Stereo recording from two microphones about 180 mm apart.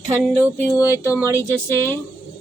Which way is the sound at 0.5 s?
15° left (ahead or behind).